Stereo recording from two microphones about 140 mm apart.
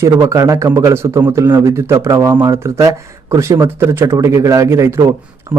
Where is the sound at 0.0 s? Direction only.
25° right (ahead or behind).